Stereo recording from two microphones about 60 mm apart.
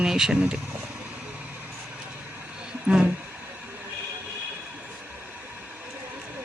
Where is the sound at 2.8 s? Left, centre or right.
Centre.